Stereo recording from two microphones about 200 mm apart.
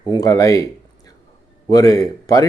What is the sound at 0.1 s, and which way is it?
Speech, 20° left (ahead or behind).